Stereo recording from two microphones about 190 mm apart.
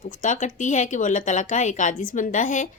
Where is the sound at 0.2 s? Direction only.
40° left (ahead or behind).